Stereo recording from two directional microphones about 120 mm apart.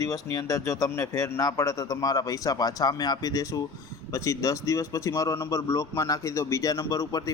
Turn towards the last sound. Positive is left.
turn(degrees=30)  # may be behind; listen again after turning